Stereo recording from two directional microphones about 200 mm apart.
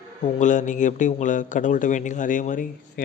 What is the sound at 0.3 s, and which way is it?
A man's voice, 40° left (ahead or behind).